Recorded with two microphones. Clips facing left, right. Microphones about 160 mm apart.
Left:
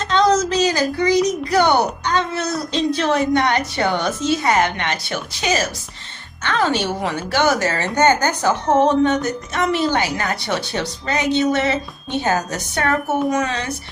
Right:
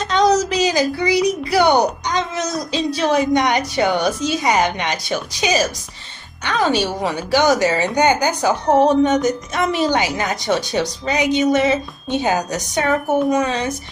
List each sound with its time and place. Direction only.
0.0 s a woman's voice: 15° right (ahead or behind)